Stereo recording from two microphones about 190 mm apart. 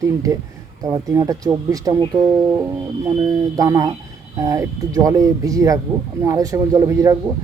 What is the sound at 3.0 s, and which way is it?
Speech, 20° right (ahead or behind).